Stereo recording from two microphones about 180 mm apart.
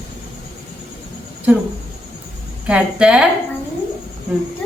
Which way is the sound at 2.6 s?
5° right (ahead or behind).